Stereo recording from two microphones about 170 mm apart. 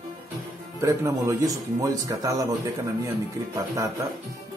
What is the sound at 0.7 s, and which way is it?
Speech, 15° right (ahead or behind).